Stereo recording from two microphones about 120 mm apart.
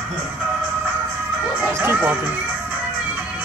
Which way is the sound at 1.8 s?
15° right (ahead or behind).